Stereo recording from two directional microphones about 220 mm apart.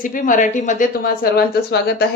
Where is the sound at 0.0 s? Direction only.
35° left (ahead or behind).